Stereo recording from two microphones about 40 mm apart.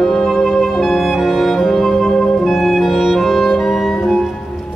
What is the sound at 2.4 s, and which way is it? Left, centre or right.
Clarinet, centre.